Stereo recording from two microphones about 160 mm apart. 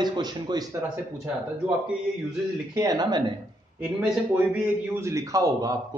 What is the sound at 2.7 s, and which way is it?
Speech, 25° right (ahead or behind).